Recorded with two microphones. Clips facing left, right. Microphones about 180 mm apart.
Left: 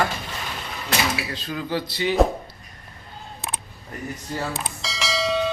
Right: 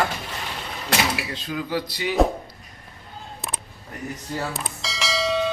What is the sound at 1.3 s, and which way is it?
Speech, 15° right (ahead or behind).